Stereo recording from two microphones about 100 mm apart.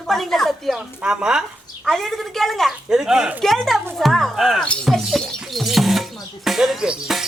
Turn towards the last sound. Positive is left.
turn(degrees=-5)  # may be behind; listen again after turning